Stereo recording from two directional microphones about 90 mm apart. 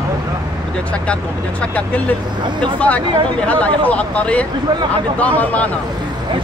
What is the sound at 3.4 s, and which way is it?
Speech, 15° left (ahead or behind).